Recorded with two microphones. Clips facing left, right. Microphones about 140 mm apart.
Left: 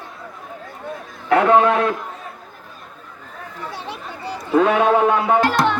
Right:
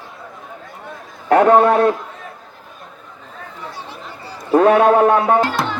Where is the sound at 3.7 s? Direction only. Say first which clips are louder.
Left 2 dB; 65° left (ahead or behind).